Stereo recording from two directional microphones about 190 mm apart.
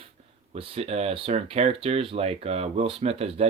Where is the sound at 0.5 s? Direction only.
30° right (ahead or behind).